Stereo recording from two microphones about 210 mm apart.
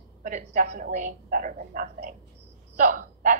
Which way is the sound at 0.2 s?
35° right (ahead or behind).